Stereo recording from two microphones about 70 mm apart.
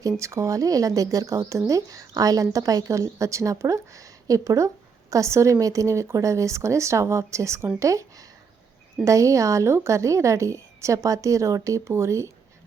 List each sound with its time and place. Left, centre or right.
0.2 s speech: right